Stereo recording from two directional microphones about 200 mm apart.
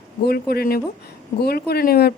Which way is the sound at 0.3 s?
50° left (ahead or behind).